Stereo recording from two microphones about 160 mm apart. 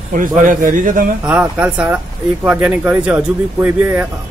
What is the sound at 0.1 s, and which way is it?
Speech, 55° right (ahead or behind).